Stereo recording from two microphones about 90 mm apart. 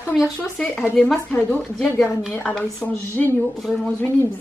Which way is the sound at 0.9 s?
15° left (ahead or behind).